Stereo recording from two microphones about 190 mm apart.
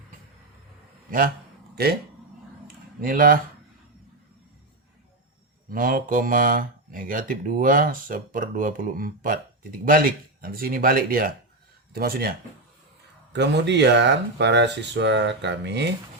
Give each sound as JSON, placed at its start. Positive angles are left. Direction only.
{"t": 1.7, "sound": "speech", "side_deg": -55}
{"t": 3.0, "sound": "speech", "side_deg": -50}
{"t": 5.6, "sound": "speech", "side_deg": -50}
{"t": 13.3, "sound": "speech", "side_deg": -65}